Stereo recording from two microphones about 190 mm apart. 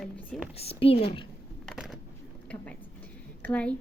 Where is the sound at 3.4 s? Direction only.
5° left (ahead or behind).